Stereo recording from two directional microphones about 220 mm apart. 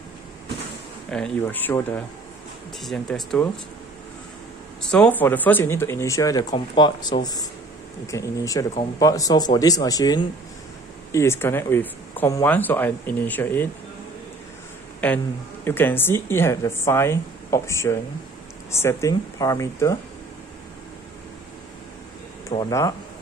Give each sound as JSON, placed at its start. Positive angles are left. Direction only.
{"t": 1.1, "sound": "speech", "side_deg": 5}
{"t": 4.8, "sound": "speech", "side_deg": 5}
{"t": 15.0, "sound": "speech", "side_deg": 5}
{"t": 22.5, "sound": "speech", "side_deg": 15}